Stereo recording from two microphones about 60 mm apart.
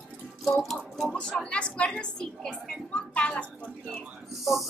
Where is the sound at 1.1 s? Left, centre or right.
Centre.